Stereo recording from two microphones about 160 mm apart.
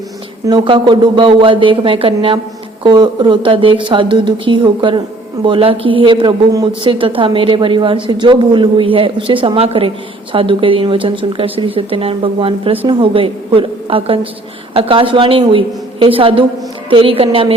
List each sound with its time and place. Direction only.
0.4 s a woman's voice: 30° right (ahead or behind)